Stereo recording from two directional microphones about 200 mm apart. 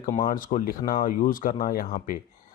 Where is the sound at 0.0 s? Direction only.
45° left (ahead or behind).